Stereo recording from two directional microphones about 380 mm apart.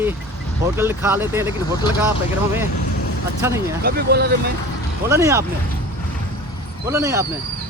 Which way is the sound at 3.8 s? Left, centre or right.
Right.